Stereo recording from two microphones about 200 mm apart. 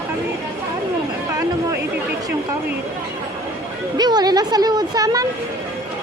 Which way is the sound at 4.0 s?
20° right (ahead or behind).